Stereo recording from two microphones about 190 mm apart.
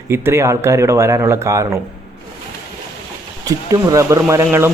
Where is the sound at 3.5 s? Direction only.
20° right (ahead or behind).